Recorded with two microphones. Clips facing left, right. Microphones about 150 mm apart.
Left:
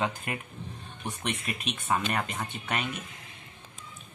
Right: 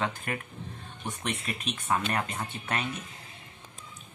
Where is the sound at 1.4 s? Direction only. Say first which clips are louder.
Even; 30° right (ahead or behind).